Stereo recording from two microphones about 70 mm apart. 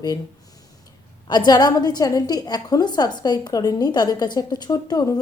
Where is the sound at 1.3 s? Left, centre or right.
Left.